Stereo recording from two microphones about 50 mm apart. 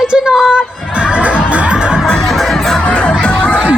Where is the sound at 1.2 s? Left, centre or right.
Right.